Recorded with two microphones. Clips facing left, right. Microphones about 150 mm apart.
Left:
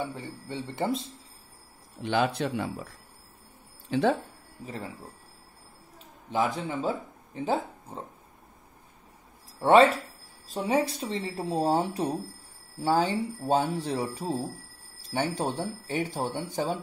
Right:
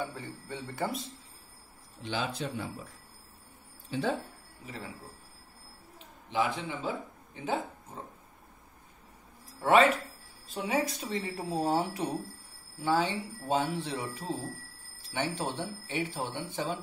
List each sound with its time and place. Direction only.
0.0 s speech: 20° left (ahead or behind)
2.0 s speech: 65° left (ahead or behind)
3.9 s speech: 75° left (ahead or behind)
6.3 s speech: 40° left (ahead or behind)
9.6 s speech: 35° left (ahead or behind)